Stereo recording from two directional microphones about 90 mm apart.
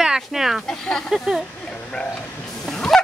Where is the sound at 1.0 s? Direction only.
5° right (ahead or behind).